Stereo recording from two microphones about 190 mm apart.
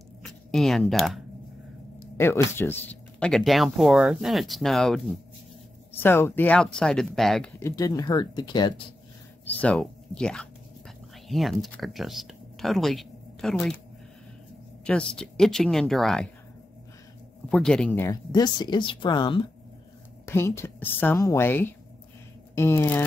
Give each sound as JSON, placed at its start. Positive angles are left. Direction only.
{"t": 0.2, "sound": "speech", "side_deg": 0}
{"t": 2.1, "sound": "speech", "side_deg": 15}
{"t": 5.9, "sound": "speech", "side_deg": 10}
{"t": 7.6, "sound": "speech", "side_deg": 20}
{"t": 9.4, "sound": "speech", "side_deg": 10}
{"t": 14.9, "sound": "speech", "side_deg": 5}
{"t": 17.5, "sound": "a woman's voice", "side_deg": 5}